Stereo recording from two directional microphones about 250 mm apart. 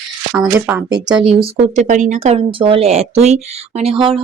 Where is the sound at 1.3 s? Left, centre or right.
Right.